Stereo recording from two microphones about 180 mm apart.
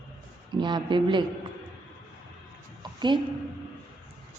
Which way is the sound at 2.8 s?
25° right (ahead or behind).